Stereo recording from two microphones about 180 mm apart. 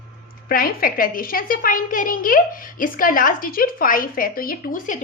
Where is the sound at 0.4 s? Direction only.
55° left (ahead or behind).